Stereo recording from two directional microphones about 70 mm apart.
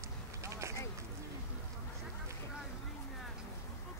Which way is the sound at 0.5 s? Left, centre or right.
Right.